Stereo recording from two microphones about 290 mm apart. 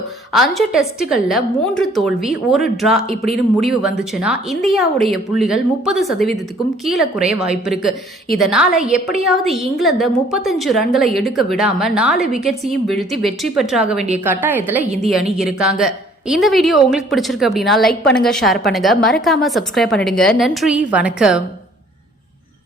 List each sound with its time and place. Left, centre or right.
0.3 s a woman's voice: centre